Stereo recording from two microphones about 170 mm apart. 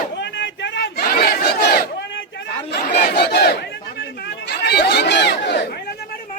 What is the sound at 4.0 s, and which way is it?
Chatter, 80° left.